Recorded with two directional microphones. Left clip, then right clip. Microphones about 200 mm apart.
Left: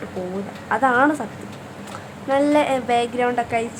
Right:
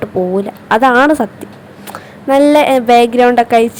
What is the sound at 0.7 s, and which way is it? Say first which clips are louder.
Speech: right 9 dB; 40° right (ahead or behind).